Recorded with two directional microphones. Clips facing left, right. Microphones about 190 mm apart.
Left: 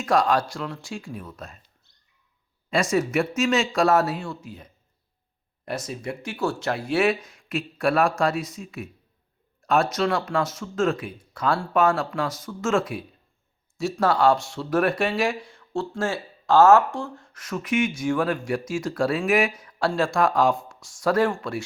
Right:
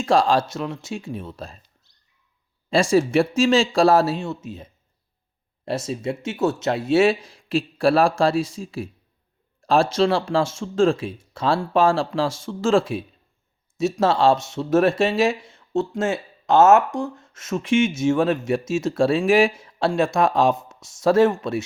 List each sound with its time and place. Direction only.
0.0 s speech: 25° right (ahead or behind)
2.6 s speech: 30° right (ahead or behind)